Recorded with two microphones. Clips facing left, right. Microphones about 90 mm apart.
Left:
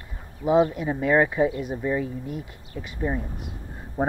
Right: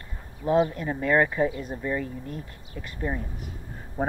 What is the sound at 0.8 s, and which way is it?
Speech, 10° left (ahead or behind).